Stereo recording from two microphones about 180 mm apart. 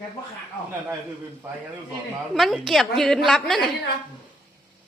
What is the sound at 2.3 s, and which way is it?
A man's voice, centre (ahead or behind).